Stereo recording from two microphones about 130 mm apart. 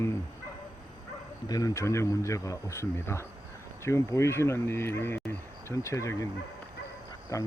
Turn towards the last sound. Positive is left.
turn(degrees=25)  # may be behind; listen again after turning